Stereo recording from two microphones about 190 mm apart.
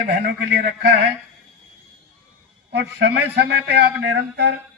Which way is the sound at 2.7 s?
65° right (ahead or behind).